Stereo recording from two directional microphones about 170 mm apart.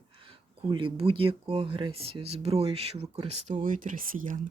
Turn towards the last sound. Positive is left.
turn(degrees=-55)  # may be behind; listen again after turning